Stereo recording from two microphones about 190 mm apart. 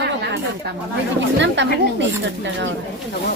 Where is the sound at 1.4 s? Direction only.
70° right (ahead or behind).